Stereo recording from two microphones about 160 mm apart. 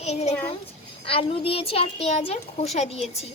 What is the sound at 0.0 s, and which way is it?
A woman's voice, 45° left (ahead or behind).